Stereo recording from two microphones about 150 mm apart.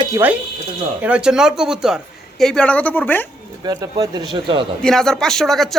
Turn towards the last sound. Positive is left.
turn(degrees=0)  # may be behind; listen again after turning